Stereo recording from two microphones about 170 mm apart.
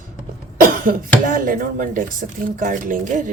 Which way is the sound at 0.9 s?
55° right (ahead or behind).